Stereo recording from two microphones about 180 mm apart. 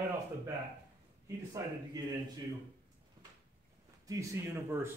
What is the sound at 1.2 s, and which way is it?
Speech, 20° right (ahead or behind).